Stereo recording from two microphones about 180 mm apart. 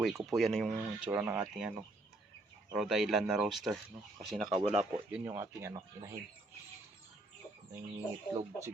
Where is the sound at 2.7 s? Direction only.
5° right (ahead or behind).